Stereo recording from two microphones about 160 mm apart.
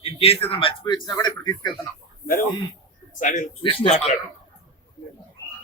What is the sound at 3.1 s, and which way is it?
Speech, 50° left (ahead or behind).